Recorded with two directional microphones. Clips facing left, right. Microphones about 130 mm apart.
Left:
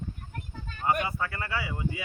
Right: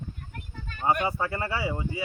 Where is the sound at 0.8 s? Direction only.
25° right (ahead or behind).